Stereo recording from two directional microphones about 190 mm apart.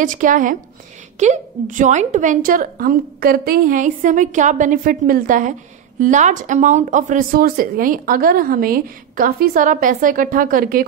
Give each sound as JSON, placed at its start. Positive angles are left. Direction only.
{"t": 0.0, "sound": "speech", "side_deg": -45}